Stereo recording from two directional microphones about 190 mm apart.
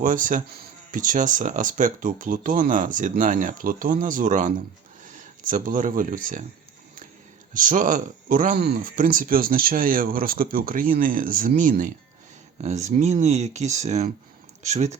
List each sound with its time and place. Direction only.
0.0 s speech: 45° right (ahead or behind)
7.5 s speech: 45° right (ahead or behind)